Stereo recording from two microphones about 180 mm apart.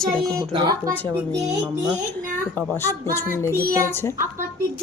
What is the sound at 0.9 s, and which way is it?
Speech, 10° left (ahead or behind).